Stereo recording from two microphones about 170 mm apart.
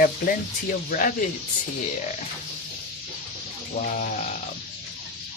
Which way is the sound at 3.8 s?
45° left (ahead or behind).